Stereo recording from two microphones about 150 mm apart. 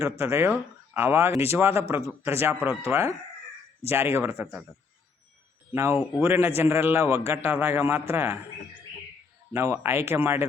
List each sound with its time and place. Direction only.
0.0 s a man's voice: 20° right (ahead or behind)
5.7 s a man's voice: 15° right (ahead or behind)
9.5 s a man's voice: 20° right (ahead or behind)